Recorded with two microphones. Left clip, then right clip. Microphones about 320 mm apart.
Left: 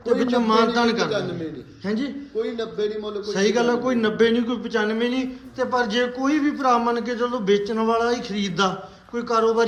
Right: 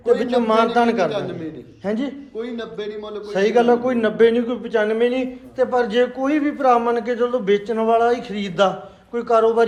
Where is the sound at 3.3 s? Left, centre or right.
Centre.